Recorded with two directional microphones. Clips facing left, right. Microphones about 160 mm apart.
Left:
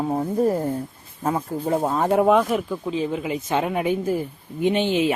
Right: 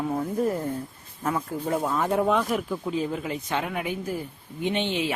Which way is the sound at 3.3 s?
20° left (ahead or behind).